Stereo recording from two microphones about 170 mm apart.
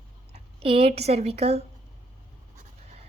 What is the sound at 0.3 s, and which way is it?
Speech, 35° right (ahead or behind).